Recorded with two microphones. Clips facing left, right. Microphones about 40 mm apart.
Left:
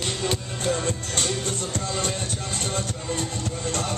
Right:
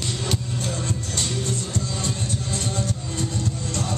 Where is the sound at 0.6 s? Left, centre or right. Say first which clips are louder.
Left 3 dB; left.